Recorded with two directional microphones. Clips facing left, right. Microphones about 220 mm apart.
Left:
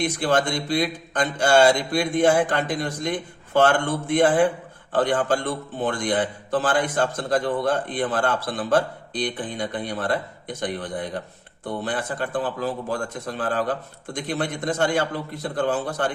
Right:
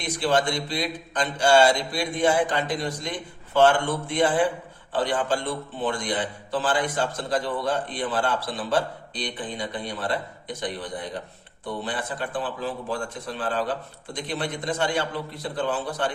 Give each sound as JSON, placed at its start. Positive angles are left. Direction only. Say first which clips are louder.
{"t": 0.0, "sound": "a man's voice", "louder": "left 2 dB", "side_deg": 50}